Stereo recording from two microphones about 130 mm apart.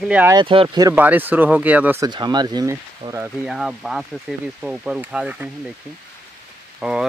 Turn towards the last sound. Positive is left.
turn(degrees=-5)  # may be behind; listen again after turning